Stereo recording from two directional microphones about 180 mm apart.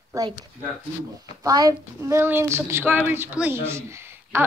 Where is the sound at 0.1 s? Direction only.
20° right (ahead or behind).